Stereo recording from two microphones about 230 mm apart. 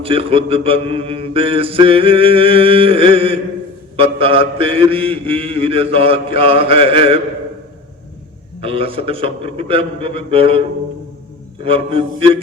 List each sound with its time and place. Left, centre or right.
0.0 s mantra: right
8.6 s mantra: right
11.6 s mantra: right